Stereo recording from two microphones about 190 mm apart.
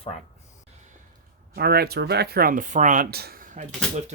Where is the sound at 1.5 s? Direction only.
55° right (ahead or behind).